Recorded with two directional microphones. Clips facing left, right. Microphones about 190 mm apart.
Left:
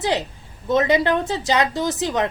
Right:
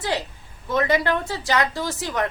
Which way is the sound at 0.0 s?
20° left (ahead or behind).